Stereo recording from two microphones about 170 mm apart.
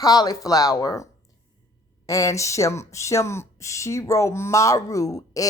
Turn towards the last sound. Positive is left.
turn(degrees=20)  # may be behind; listen again after turning